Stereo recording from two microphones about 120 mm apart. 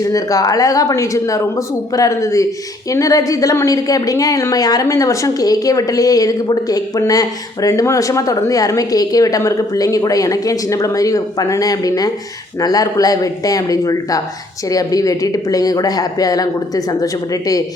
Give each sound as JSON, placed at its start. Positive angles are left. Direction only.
{"t": 0.0, "sound": "a woman's voice", "side_deg": 30}